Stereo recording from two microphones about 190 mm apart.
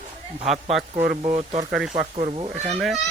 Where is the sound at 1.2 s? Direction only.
35° right (ahead or behind).